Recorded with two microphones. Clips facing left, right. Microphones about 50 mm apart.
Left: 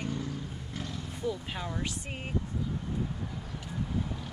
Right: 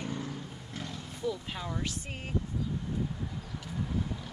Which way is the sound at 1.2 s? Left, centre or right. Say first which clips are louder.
Even; centre.